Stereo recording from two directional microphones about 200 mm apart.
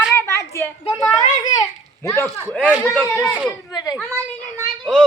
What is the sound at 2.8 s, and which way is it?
A child's voice, 10° left (ahead or behind).